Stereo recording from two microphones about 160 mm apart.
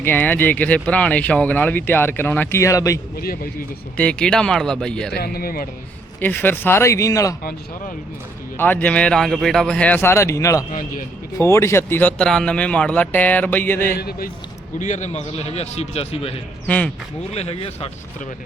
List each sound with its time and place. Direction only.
0.0 s speech: 10° left (ahead or behind)
3.2 s speech: 70° left (ahead or behind)
3.9 s speech: 5° left (ahead or behind)
5.1 s speech: 70° left (ahead or behind)
6.1 s speech: 10° left (ahead or behind)
8.5 s speech: 10° left (ahead or behind)
10.7 s a man's voice: 55° left (ahead or behind)
11.3 s speech: 15° left (ahead or behind)
14.0 s speech: 75° left (ahead or behind)
14.8 s a man's voice: 50° left (ahead or behind)
16.6 s speech: 10° left (ahead or behind)
17.3 s a man's voice: 40° left (ahead or behind)